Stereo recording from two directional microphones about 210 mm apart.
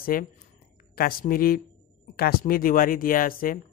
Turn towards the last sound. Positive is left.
turn(degrees=40)  # may be behind; listen again after turning